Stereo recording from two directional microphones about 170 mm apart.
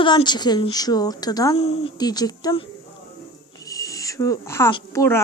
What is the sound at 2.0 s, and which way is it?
Speech, 25° left (ahead or behind).